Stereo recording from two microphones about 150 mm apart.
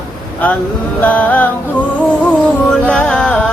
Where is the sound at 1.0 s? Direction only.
10° left (ahead or behind).